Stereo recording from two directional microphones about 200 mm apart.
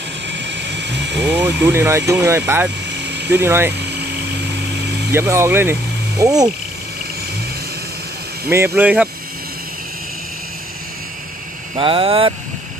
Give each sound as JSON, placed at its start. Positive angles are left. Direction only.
{"t": 0.3, "sound": "vehicle", "side_deg": -60}
{"t": 1.2, "sound": "speech", "side_deg": -10}
{"t": 5.1, "sound": "speech", "side_deg": -10}
{"t": 8.5, "sound": "speech", "side_deg": -10}
{"t": 11.7, "sound": "speech", "side_deg": -25}